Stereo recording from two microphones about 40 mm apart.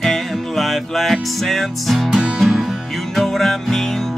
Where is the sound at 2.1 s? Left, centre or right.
Centre.